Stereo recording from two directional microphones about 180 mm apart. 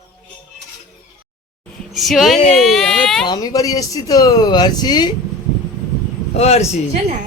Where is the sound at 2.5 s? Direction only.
Centre (ahead or behind).